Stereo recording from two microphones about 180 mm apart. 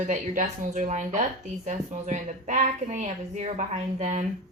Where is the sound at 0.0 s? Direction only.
40° right (ahead or behind).